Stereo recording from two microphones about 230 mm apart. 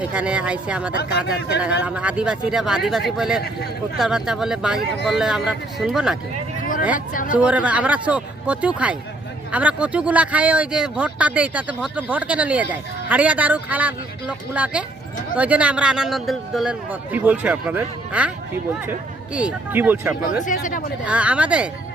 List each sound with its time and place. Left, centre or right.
0.0 s speech: centre
7.3 s speech: centre
20.4 s speech: left
21.0 s speech: centre